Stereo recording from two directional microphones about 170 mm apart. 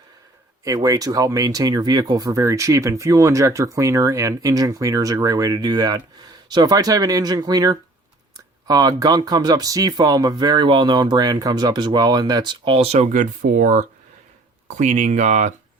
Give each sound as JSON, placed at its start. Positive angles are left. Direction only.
{"t": 0.6, "sound": "speech", "side_deg": -20}